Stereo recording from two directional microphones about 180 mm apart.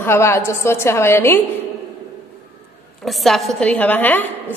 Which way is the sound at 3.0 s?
Centre (ahead or behind).